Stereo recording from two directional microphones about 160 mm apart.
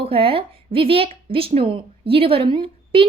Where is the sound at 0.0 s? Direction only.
35° right (ahead or behind).